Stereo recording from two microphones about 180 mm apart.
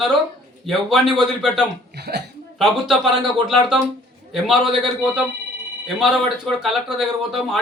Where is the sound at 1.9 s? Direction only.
65° right (ahead or behind).